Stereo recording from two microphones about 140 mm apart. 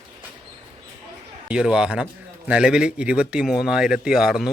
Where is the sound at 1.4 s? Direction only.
5° right (ahead or behind).